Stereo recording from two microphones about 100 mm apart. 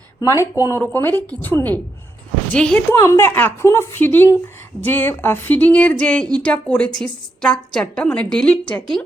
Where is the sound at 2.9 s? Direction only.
25° left (ahead or behind).